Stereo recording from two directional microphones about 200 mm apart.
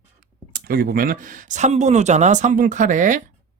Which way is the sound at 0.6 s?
45° right (ahead or behind).